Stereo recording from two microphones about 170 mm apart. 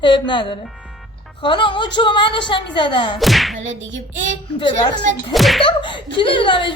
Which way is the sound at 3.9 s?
90° right.